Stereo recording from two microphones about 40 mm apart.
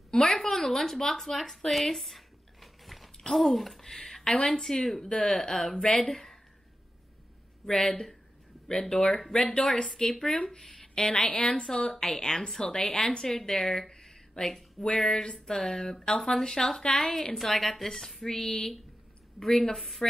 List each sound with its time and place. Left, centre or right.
0.1 s speech: centre
1.9 s a sound: centre
3.8 s speech: centre
7.6 s speech: centre
10.8 s a sound: centre
11.2 s a woman's voice: left
11.9 s speech: centre
13.3 s a woman's voice: centre